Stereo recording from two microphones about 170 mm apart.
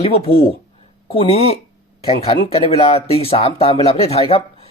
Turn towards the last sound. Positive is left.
turn(degrees=35)  # may be behind; listen again after turning